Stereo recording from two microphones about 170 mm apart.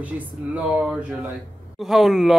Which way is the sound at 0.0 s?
10° right (ahead or behind).